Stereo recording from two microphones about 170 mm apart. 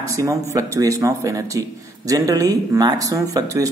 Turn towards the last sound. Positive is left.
turn(degrees=-20)  # may be behind; listen again after turning